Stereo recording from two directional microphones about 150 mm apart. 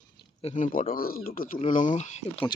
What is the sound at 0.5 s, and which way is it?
Speech, 60° left (ahead or behind).